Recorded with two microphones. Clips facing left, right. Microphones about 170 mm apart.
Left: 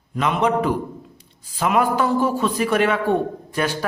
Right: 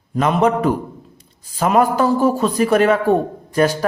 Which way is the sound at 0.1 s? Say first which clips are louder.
Right 4 dB; 40° right (ahead or behind).